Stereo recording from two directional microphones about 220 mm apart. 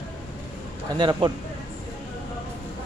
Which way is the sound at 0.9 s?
20° right (ahead or behind).